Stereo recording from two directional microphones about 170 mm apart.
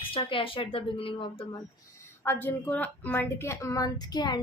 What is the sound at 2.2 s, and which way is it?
A woman's voice, 10° left (ahead or behind).